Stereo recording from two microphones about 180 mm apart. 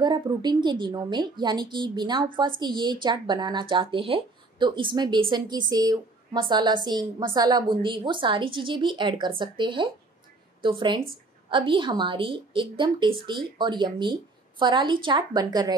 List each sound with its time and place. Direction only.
0.0 s speech: 25° right (ahead or behind)